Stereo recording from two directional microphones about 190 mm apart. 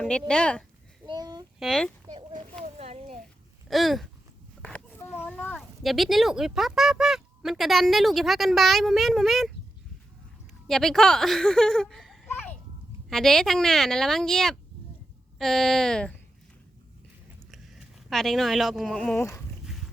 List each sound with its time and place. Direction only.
0.0 s speech: centre (ahead or behind)
1.0 s child singing: 20° right (ahead or behind)
1.5 s speech: centre (ahead or behind)
2.6 s a sound: 35° right (ahead or behind)
3.7 s a sound: centre (ahead or behind)
5.3 s speech: 5° left (ahead or behind)
10.7 s speech: centre (ahead or behind)
12.3 s children playing: 10° left (ahead or behind)
13.1 s speech: centre (ahead or behind)
17.5 s speech: centre (ahead or behind)
19.6 s a sound: centre (ahead or behind)